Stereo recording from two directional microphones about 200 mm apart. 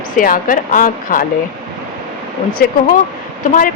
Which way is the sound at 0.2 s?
45° left (ahead or behind).